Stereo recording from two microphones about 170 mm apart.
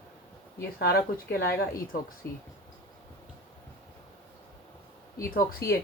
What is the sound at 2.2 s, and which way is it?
Speech, 10° left (ahead or behind).